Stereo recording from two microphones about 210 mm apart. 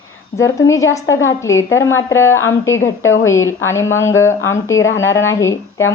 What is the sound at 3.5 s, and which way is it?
A woman's voice, 15° left (ahead or behind).